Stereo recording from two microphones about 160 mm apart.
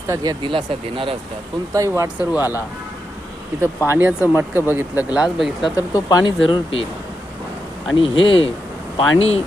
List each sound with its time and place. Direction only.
0.1 s speech: 25° right (ahead or behind)
1.7 s speech: 20° right (ahead or behind)
3.8 s speech: 10° right (ahead or behind)
5.9 s speech: 25° left (ahead or behind)
7.9 s speech: 35° left (ahead or behind)